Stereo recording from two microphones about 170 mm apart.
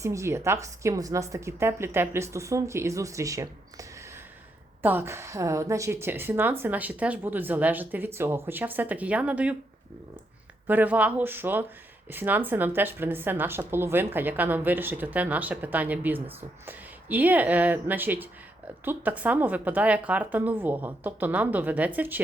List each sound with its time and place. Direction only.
0.0 s speech: 15° right (ahead or behind)
10.7 s speech: 10° right (ahead or behind)